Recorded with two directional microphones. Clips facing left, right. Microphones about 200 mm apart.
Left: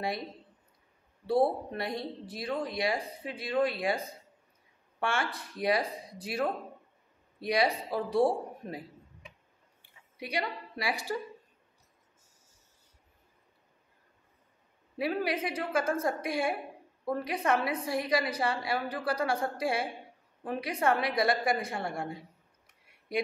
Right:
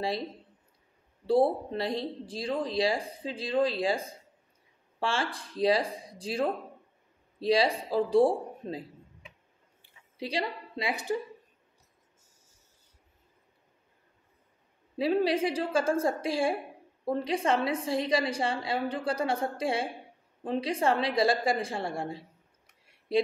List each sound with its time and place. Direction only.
1.2 s a woman's voice: 25° right (ahead or behind)
5.0 s a woman's voice: 30° right (ahead or behind)
10.1 s a woman's voice: 25° right (ahead or behind)
15.0 s a woman's voice: 25° right (ahead or behind)